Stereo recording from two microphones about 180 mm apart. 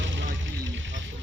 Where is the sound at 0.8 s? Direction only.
90° right.